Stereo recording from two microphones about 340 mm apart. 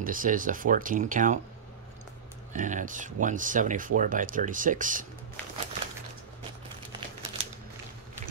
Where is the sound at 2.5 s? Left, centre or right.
Right.